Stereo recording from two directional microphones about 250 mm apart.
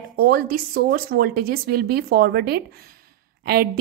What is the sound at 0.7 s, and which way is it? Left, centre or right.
A woman's voice, right.